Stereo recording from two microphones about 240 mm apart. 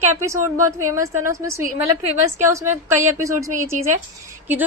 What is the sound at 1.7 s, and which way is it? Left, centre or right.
Speech, right.